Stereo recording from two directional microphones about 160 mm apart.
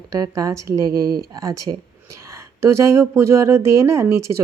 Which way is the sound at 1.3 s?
20° right (ahead or behind).